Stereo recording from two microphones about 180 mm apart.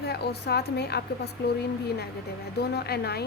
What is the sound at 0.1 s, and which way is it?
A woman's voice, 65° left (ahead or behind).